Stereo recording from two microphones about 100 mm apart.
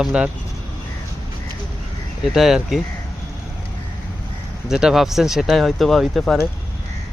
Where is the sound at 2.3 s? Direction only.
5° right (ahead or behind).